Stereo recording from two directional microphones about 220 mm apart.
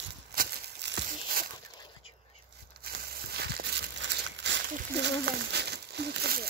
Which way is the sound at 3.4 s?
50° right (ahead or behind).